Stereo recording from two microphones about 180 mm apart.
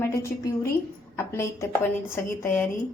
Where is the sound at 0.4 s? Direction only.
15° left (ahead or behind).